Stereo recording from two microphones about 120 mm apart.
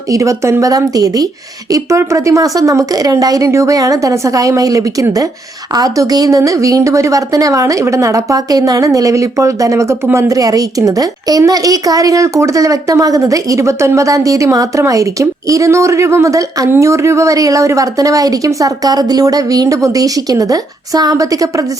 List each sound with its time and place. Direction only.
0.1 s a woman's voice: 25° right (ahead or behind)